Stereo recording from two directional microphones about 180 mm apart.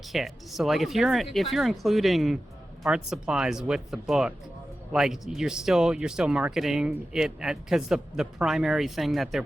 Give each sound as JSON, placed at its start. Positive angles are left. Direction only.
{"t": 0.1, "sound": "speech", "side_deg": 0}